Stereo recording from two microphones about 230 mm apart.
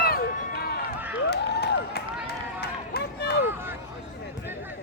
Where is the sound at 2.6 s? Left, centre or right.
Left.